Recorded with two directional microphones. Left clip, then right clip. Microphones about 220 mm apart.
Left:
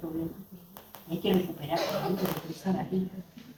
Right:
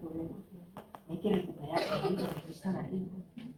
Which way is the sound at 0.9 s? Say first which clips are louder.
Left 4 dB; 40° left (ahead or behind).